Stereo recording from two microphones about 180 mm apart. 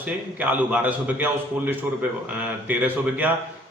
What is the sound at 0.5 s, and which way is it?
Speech, 10° right (ahead or behind).